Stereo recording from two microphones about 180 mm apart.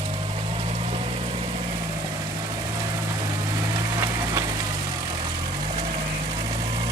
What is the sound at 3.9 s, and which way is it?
Engine, 15° right (ahead or behind).